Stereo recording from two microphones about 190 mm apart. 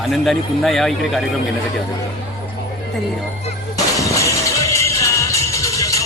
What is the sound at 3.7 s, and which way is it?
Music, 15° left (ahead or behind).